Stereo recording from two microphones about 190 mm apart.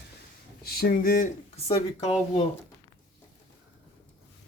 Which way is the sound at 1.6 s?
30° left (ahead or behind).